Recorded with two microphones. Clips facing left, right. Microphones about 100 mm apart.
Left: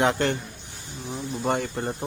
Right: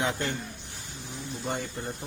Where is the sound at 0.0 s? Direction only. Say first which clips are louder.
Left 7 dB; 70° left (ahead or behind).